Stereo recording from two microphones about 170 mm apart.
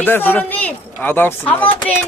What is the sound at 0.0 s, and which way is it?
Speech, 10° left (ahead or behind).